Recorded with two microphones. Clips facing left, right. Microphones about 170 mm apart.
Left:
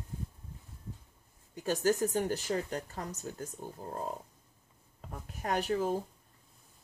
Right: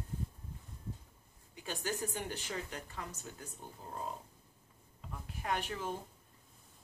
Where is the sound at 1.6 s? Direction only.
40° left (ahead or behind).